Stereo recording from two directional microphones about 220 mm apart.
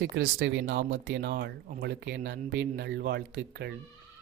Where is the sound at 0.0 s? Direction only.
55° right (ahead or behind).